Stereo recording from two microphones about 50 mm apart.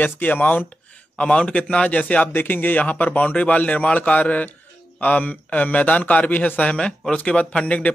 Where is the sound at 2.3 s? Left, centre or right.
Left.